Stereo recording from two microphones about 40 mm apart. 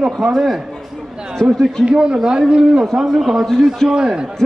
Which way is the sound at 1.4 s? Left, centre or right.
Centre.